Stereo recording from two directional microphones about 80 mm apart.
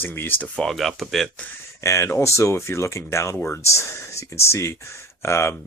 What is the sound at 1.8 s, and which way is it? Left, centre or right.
Speech, left.